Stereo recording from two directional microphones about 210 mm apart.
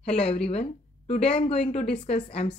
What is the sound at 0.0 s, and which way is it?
A woman's voice, 30° left (ahead or behind).